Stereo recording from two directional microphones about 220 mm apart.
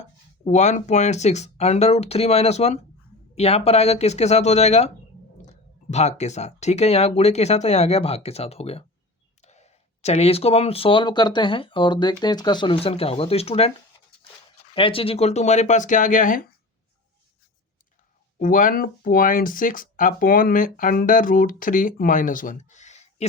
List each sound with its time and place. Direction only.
0.4 s speech: 30° left (ahead or behind)
18.3 s speech: 40° left (ahead or behind)